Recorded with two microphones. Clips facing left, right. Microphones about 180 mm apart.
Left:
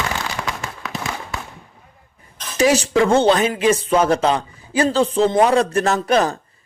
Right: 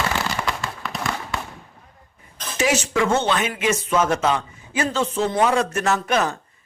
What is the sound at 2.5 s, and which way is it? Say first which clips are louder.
Speech: left 5 dB; 35° left (ahead or behind).